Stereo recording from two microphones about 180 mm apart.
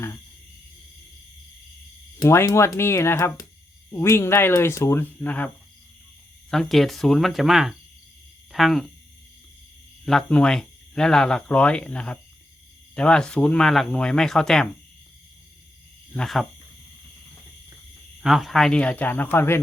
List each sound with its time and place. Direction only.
2.1 s speech: 15° left (ahead or behind)
6.5 s speech: centre (ahead or behind)
10.1 s speech: 5° left (ahead or behind)
16.1 s speech: centre (ahead or behind)
18.2 s speech: centre (ahead or behind)